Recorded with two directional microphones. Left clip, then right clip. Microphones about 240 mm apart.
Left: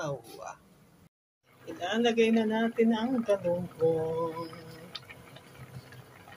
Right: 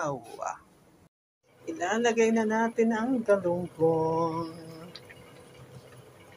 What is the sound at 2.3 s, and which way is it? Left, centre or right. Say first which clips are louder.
Speech: right 2 dB; centre.